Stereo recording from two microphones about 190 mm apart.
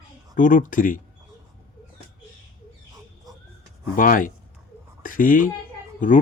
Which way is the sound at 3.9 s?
45° left (ahead or behind).